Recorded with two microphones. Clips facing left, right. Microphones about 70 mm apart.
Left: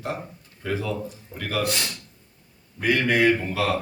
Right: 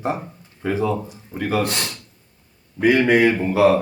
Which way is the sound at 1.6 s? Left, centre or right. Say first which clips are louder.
Right 2 dB; right.